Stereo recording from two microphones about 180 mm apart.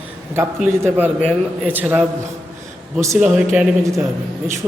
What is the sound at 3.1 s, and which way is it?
Speech, centre (ahead or behind).